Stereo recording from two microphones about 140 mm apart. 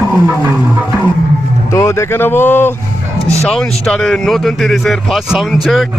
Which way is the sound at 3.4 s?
Centre (ahead or behind).